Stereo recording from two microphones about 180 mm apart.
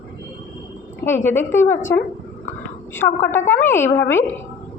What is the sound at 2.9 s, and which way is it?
A woman's voice, 10° left (ahead or behind).